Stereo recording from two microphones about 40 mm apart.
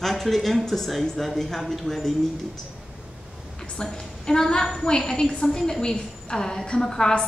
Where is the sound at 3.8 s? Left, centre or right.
Centre.